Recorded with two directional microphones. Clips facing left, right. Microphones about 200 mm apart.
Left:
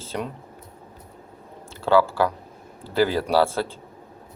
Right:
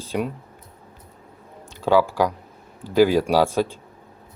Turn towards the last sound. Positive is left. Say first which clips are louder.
# right 2 dB
turn(degrees=-15)  # may be behind; listen again after turning